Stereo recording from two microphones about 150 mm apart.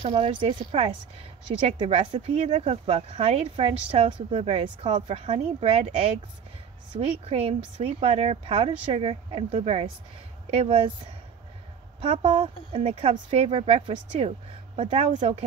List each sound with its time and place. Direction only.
0.1 s a woman's voice: 35° right (ahead or behind)
12.0 s speech: 45° right (ahead or behind)